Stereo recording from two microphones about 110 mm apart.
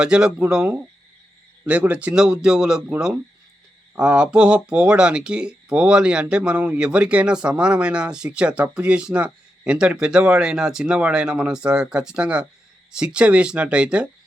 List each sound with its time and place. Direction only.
0.0 s speech: 5° right (ahead or behind)
3.9 s speech: 10° right (ahead or behind)